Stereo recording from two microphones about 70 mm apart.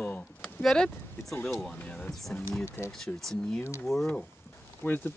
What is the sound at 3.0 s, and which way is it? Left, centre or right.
Speech, centre.